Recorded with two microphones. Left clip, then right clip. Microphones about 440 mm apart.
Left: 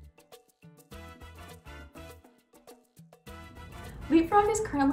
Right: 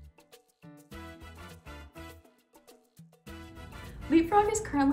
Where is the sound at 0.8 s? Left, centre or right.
Left.